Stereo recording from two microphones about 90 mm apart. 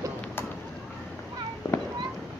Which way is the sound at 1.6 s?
45° left (ahead or behind).